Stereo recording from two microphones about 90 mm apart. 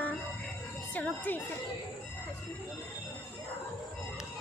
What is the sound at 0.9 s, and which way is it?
Speech, 20° left (ahead or behind).